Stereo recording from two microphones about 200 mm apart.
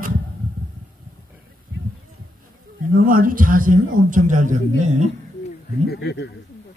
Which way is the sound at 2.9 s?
45° right (ahead or behind).